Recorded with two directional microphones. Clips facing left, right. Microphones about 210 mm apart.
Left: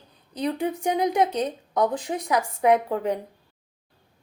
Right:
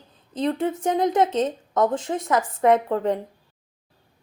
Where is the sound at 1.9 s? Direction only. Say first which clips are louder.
Right 2 dB; 15° left (ahead or behind).